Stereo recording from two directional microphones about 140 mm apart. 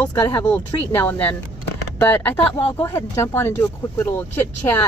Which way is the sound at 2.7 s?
20° left (ahead or behind).